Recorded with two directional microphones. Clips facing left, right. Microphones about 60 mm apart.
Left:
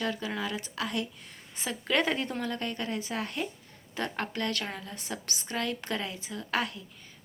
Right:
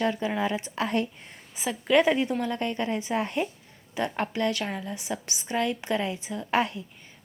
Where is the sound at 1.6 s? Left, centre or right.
Centre.